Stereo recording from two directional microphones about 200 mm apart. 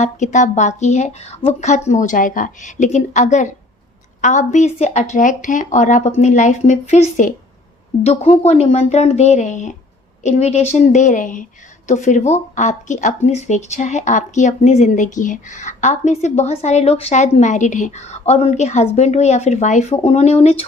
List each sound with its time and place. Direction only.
0.0 s speech: 35° left (ahead or behind)